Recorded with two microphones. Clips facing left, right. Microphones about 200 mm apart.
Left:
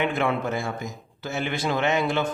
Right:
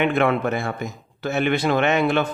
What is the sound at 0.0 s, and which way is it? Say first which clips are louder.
A man's voice: right 5 dB; 65° right (ahead or behind).